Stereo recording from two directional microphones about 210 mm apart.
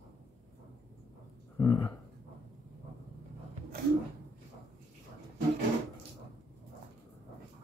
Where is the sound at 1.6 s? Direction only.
15° left (ahead or behind).